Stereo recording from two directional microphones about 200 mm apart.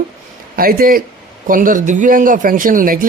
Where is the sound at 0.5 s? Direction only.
45° right (ahead or behind).